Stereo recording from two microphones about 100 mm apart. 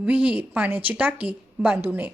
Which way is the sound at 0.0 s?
10° right (ahead or behind).